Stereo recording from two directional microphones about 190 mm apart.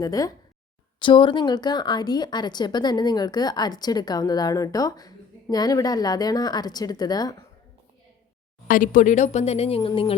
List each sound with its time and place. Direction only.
0.0 s a woman's voice: 20° left (ahead or behind)
8.6 s speech: 45° left (ahead or behind); by 10.2 s 30° left (ahead or behind)